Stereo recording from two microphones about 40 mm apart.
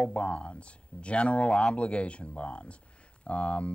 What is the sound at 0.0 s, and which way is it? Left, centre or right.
Speech, left.